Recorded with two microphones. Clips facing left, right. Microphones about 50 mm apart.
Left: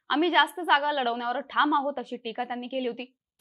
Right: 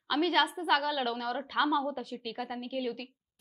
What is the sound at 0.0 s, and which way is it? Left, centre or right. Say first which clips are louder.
A woman's voice: left 5 dB; left.